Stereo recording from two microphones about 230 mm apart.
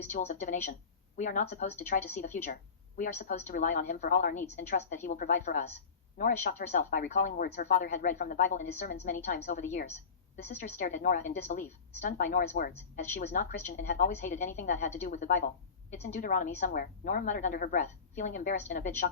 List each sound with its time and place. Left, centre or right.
0.1 s speech: left